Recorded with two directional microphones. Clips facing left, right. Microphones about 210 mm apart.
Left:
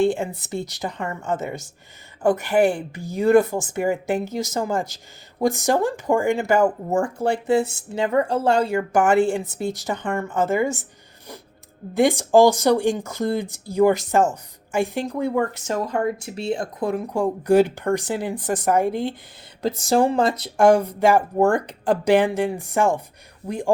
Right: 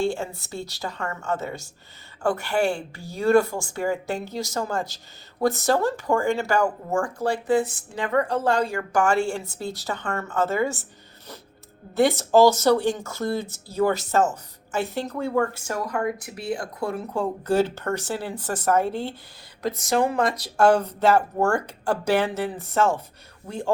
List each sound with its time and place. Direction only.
0.0 s speech: 15° left (ahead or behind)
11.9 s speech: 15° left (ahead or behind)
19.6 s speech: 30° left (ahead or behind)
20.6 s speech: 15° left (ahead or behind)